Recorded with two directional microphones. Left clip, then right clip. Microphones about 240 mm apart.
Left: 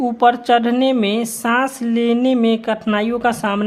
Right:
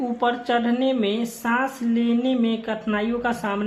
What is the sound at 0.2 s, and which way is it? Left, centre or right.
Speech, left.